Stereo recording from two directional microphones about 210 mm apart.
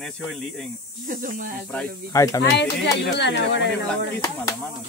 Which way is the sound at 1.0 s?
40° right (ahead or behind).